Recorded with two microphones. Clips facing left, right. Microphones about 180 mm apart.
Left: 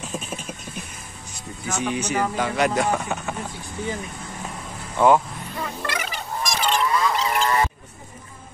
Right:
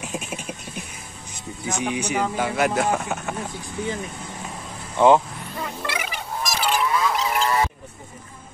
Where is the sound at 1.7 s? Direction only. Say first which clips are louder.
Even; 15° right (ahead or behind).